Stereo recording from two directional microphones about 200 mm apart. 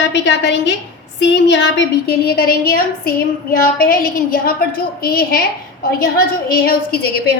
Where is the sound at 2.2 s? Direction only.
50° left (ahead or behind).